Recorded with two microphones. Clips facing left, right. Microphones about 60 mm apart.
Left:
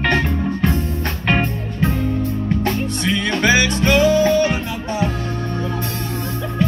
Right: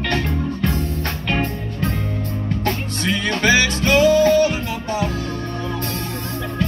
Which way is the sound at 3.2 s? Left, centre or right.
Left.